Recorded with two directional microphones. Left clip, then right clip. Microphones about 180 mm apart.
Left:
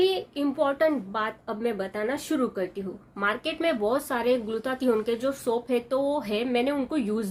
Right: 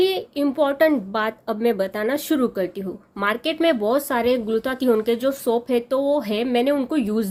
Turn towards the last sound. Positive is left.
turn(degrees=-40)  # may be behind; listen again after turning